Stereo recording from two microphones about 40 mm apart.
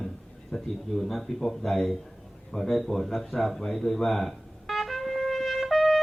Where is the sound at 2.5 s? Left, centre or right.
Centre.